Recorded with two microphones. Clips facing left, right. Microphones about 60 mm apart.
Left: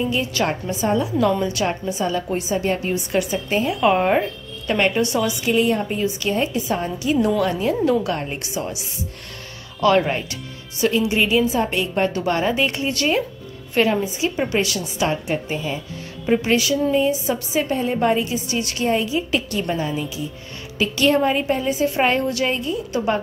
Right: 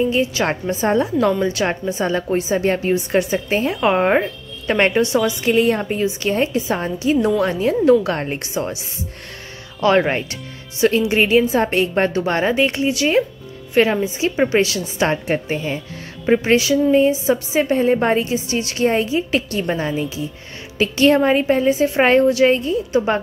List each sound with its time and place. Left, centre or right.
0.1 s a woman's voice: right
0.5 s a woman's voice: right
1.4 s a woman's voice: right
3.8 s a woman's voice: right
9.8 s a woman's voice: right
12.8 s speech: centre
13.7 s a woman's voice: right